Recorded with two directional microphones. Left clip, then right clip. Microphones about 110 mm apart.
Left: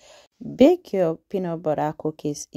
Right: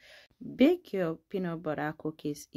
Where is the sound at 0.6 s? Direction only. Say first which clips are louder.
Left 9 dB; 50° left (ahead or behind).